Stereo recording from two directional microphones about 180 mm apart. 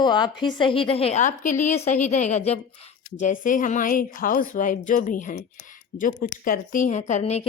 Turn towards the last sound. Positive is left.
turn(degrees=40)  # may be behind; listen again after turning